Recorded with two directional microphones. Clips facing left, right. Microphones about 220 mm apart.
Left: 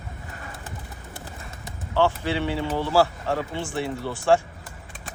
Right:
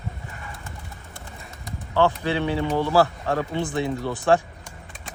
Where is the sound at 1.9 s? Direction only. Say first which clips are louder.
Right 1 dB; 15° right (ahead or behind).